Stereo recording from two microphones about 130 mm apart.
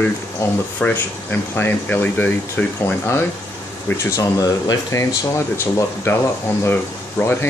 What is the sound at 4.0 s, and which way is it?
Speech, 25° left (ahead or behind).